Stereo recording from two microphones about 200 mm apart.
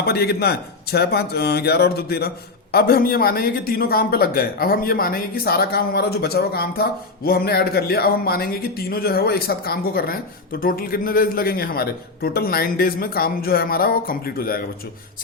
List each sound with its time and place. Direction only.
0.0 s speech: 50° left (ahead or behind)